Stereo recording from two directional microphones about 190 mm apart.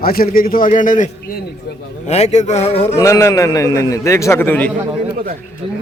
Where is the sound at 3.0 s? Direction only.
15° left (ahead or behind).